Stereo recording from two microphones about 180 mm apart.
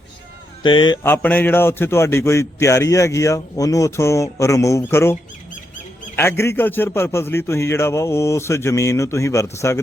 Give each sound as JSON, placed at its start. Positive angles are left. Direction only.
{"t": 0.6, "sound": "speech", "side_deg": 25}
{"t": 1.0, "sound": "a man's voice", "side_deg": 10}
{"t": 6.1, "sound": "a man's voice", "side_deg": 15}